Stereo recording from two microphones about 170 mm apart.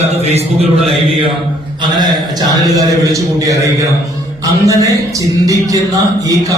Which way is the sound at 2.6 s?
20° right (ahead or behind).